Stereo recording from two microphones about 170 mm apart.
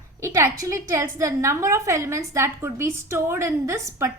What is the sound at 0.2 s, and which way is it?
A woman's voice, 15° right (ahead or behind).